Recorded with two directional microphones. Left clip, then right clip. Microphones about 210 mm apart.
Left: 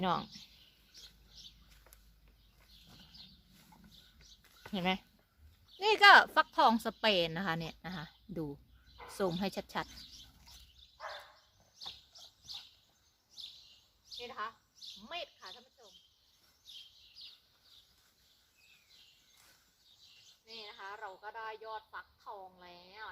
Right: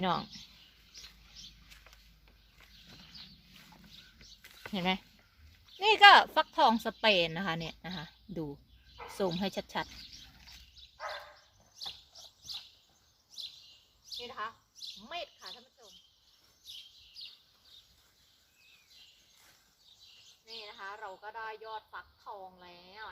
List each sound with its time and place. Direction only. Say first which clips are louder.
0.0 s a woman's voice: right 2 dB; centre (ahead or behind)
4.7 s a woman's voice: right 2 dB; centre (ahead or behind)
11.8 s bird: right 4 dB; 50° right (ahead or behind)
13.3 s bird vocalization: right 5 dB; 50° right (ahead or behind)
14.2 s speech: right 1 dB; 10° left (ahead or behind)
15.0 s bird: right 1 dB; 10° left (ahead or behind)
20.5 s speech: right 3 dB; 10° left (ahead or behind)